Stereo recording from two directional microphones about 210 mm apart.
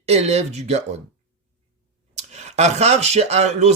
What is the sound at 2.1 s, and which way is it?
Speech, 30° right (ahead or behind).